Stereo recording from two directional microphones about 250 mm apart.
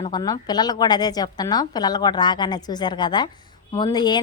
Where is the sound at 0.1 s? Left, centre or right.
Centre.